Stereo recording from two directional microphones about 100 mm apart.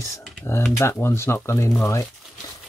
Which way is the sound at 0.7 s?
25° left (ahead or behind).